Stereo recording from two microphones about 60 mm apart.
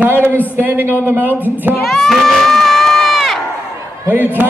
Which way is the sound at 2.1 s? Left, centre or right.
Centre.